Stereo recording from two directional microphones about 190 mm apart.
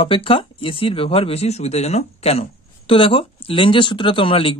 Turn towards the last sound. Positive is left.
turn(degrees=30)  # may be behind; listen again after turning